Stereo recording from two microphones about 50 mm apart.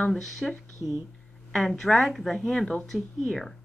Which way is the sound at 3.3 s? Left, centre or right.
Centre.